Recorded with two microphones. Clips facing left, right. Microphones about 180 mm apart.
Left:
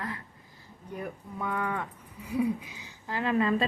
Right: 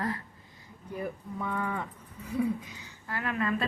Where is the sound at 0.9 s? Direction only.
Centre (ahead or behind).